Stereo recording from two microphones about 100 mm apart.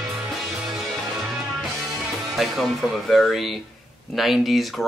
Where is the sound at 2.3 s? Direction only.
Centre (ahead or behind).